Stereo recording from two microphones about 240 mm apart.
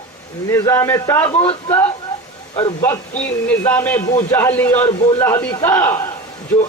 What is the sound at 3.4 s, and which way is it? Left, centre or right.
A man's voice, centre.